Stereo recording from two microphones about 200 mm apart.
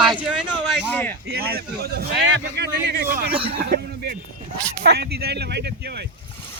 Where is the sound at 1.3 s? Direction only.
50° right (ahead or behind).